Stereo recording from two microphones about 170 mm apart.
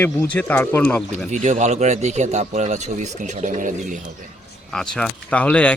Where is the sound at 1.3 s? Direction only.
45° right (ahead or behind).